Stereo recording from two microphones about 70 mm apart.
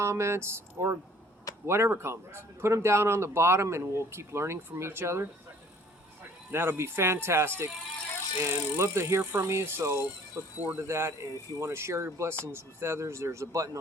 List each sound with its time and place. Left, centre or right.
0.0 s a man's voice: right
6.5 s a man's voice: right
10.6 s speech: right
10.8 s a man's voice: right